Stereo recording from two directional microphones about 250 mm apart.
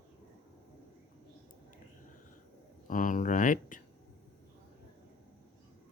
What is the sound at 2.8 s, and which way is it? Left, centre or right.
Speech, left.